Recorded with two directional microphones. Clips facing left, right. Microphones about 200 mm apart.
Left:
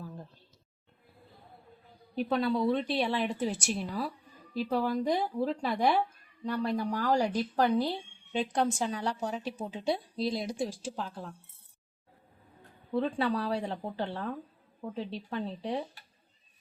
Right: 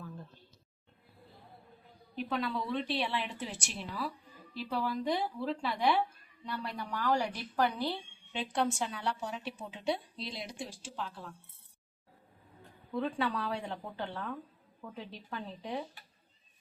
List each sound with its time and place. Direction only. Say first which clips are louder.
2.1 s a woman's voice: left 6 dB; 35° left (ahead or behind)
12.9 s a woman's voice: left 4 dB; 35° left (ahead or behind)